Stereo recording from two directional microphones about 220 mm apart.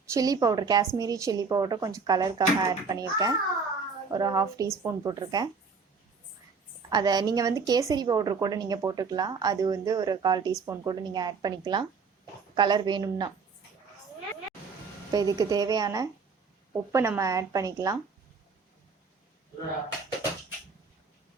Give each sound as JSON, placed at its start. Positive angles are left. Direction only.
{"t": 0.1, "sound": "a woman's voice", "side_deg": -15}
{"t": 6.9, "sound": "a woman's voice", "side_deg": -20}
{"t": 15.1, "sound": "a woman's voice", "side_deg": -15}